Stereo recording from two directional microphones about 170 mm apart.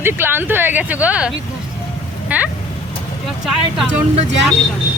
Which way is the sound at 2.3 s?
10° right (ahead or behind).